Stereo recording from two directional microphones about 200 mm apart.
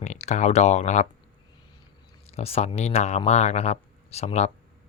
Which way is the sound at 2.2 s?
30° left (ahead or behind).